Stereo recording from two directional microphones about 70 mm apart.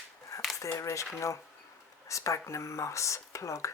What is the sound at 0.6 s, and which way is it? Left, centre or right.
Speech, left.